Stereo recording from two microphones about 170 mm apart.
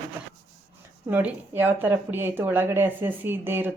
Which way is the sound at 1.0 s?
10° right (ahead or behind).